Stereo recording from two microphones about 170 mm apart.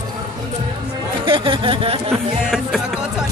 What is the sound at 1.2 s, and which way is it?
Speech, 30° right (ahead or behind).